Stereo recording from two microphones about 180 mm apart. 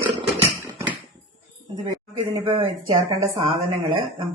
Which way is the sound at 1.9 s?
25° right (ahead or behind).